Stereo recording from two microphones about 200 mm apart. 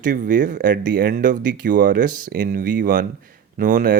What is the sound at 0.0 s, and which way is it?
Speech, 40° right (ahead or behind).